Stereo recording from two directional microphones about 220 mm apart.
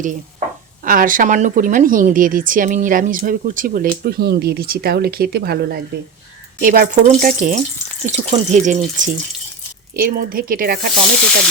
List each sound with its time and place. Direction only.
0.0 s speech: 35° right (ahead or behind)